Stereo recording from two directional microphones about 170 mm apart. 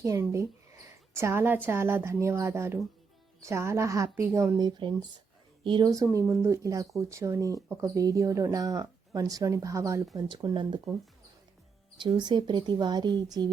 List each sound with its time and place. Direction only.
0.0 s a woman's voice: 15° right (ahead or behind)
11.9 s speech: 25° right (ahead or behind)